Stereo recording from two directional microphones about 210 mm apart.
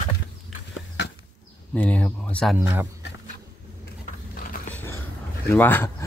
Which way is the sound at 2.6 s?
10° right (ahead or behind).